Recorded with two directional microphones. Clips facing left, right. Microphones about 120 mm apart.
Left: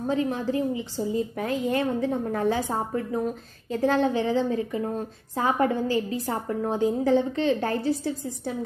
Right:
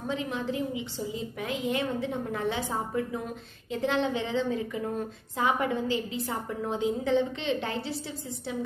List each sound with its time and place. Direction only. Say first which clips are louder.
0.0 s a woman's voice: left 6 dB; 40° left (ahead or behind)